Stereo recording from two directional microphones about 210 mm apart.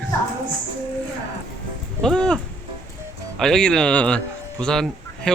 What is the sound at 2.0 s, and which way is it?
Speech, 5° left (ahead or behind).